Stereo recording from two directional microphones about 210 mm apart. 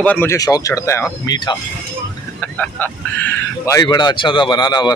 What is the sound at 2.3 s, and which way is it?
Speech, 5° left (ahead or behind).